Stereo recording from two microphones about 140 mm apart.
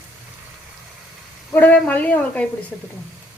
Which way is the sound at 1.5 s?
15° left (ahead or behind).